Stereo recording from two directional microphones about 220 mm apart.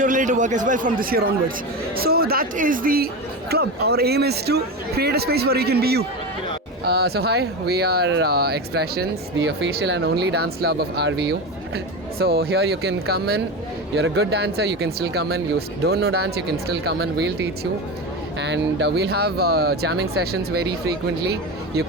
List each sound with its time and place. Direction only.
0.0 s speech: 35° right (ahead or behind)
18.3 s speech: 55° right (ahead or behind)